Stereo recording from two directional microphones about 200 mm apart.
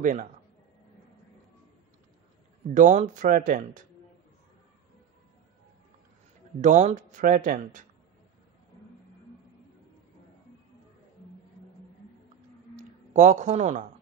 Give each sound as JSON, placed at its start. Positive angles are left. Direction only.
{"t": 0.0, "sound": "speech", "side_deg": -40}
{"t": 2.7, "sound": "speech", "side_deg": -35}
{"t": 6.6, "sound": "speech", "side_deg": -35}
{"t": 12.7, "sound": "speech", "side_deg": -35}